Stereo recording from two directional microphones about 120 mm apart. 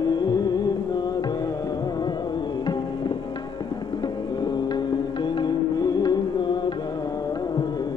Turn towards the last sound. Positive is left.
turn(degrees=40)  # may be behind; listen again after turning